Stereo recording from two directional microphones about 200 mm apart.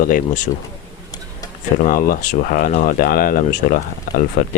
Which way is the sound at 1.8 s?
45° left (ahead or behind).